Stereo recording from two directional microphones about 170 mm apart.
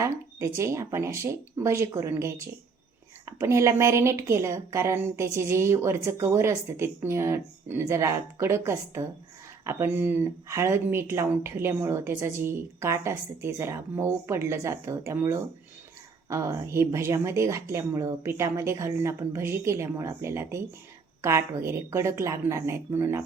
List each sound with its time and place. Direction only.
0.0 s a woman's voice: 15° right (ahead or behind)